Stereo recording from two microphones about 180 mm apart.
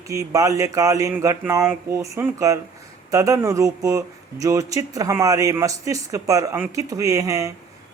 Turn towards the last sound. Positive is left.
turn(degrees=-20)  # may be behind; listen again after turning